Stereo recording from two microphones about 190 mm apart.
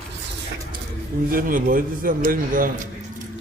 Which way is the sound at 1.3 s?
45° right (ahead or behind).